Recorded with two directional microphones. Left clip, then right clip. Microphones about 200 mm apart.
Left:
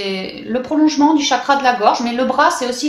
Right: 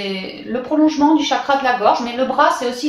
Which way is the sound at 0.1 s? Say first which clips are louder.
Left 2 dB; 45° left (ahead or behind).